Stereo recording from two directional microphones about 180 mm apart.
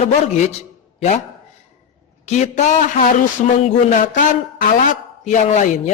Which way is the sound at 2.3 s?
40° left (ahead or behind).